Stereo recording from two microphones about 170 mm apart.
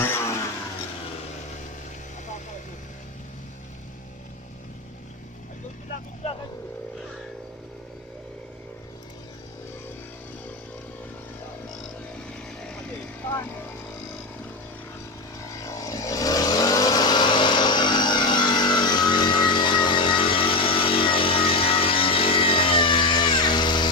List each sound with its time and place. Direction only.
0.0 s vehicle: 15° left (ahead or behind)
13.2 s vehicle: 10° left (ahead or behind)
15.6 s vehicle: 20° left (ahead or behind)